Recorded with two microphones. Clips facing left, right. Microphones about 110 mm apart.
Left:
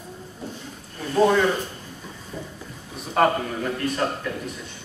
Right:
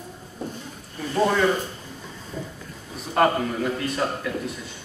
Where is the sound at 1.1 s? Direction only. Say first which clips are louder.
Left 3 dB; centre (ahead or behind).